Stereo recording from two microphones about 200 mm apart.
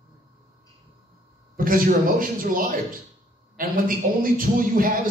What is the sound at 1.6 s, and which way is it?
A man's voice, 45° right (ahead or behind).